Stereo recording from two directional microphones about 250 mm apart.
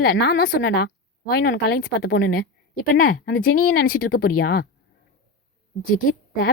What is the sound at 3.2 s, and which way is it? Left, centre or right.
Speech, left.